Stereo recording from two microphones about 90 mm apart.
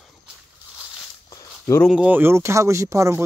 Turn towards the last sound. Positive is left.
turn(degrees=-35)  # may be behind; listen again after turning